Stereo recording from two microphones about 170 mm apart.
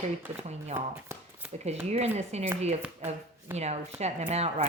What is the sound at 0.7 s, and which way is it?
Speech, 15° right (ahead or behind).